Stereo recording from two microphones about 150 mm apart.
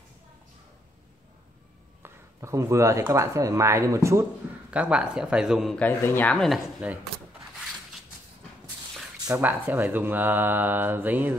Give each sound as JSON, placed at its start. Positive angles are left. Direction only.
{"t": 2.0, "sound": "speech", "side_deg": -20}
{"t": 4.6, "sound": "speech", "side_deg": -10}
{"t": 5.8, "sound": "speech", "side_deg": 15}
{"t": 6.8, "sound": "speech", "side_deg": -10}
{"t": 9.3, "sound": "speech", "side_deg": -10}